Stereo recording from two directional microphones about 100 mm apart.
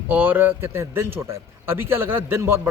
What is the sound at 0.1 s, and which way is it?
Speech, 15° right (ahead or behind).